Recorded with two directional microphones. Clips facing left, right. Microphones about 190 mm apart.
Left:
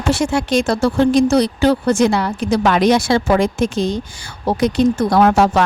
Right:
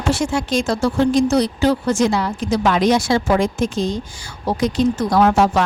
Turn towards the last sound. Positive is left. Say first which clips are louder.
# left 2 dB
turn(degrees=65)  # may be behind; listen again after turning